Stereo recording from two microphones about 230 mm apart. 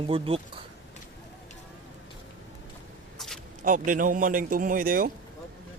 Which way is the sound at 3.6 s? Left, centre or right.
Right.